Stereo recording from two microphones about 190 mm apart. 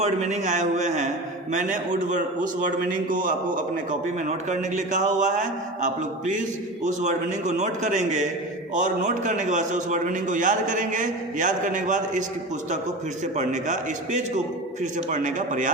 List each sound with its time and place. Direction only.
0.0 s a man's voice: 35° right (ahead or behind)
13.3 s a man's voice: 40° right (ahead or behind)